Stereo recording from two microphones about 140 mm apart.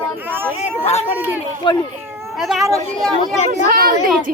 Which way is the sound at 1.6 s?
35° left (ahead or behind).